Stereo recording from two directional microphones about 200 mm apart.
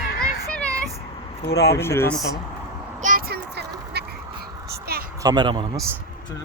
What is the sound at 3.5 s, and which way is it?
Quack, 55° right (ahead or behind).